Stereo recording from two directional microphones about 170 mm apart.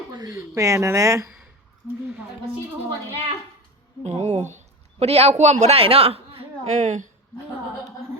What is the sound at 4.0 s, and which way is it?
Speech, 40° right (ahead or behind).